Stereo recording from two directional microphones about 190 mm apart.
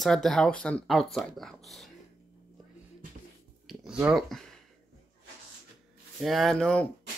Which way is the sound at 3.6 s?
5° right (ahead or behind).